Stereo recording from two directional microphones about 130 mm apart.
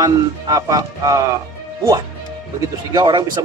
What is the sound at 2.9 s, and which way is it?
Speech, 35° right (ahead or behind).